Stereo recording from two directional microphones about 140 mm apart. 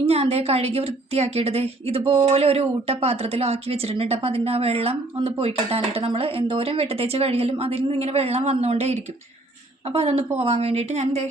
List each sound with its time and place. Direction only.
0.0 s a woman's voice: 45° right (ahead or behind)